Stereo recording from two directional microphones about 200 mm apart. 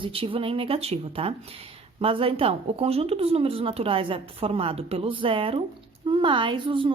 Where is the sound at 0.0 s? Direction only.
25° right (ahead or behind).